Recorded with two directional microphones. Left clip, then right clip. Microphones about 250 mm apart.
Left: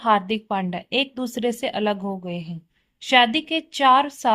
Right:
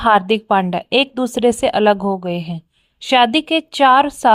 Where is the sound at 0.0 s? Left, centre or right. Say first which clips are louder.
Right 7 dB; right.